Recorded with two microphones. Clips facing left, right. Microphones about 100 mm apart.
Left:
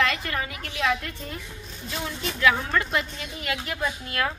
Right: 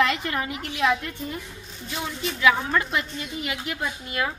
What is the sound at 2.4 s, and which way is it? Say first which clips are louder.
A woman's voice: right 1 dB; 15° right (ahead or behind).